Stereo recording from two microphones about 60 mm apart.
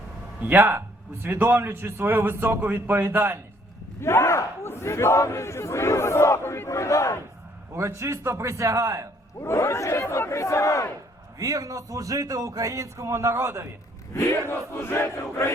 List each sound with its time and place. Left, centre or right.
0.5 s a man's voice: right
4.0 s speech: left
6.7 s battle cry: left
7.7 s a man's voice: right
9.4 s speech: left
11.3 s speech: right
14.1 s speech: left
14.5 s battle cry: left